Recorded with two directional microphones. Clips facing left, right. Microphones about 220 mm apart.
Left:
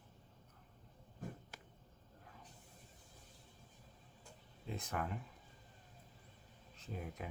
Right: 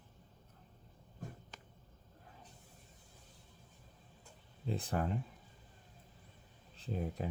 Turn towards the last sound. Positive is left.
turn(degrees=-35)  # may be behind; listen again after turning